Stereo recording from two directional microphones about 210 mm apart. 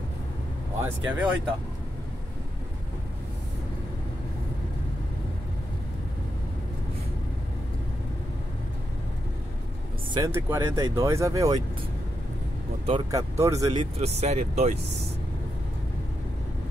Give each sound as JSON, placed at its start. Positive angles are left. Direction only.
{"t": 0.8, "sound": "speech", "side_deg": -5}
{"t": 10.1, "sound": "speech", "side_deg": -15}
{"t": 12.8, "sound": "speech", "side_deg": -20}
{"t": 13.9, "sound": "speech", "side_deg": -30}